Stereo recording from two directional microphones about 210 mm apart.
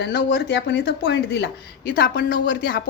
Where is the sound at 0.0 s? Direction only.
55° left (ahead or behind).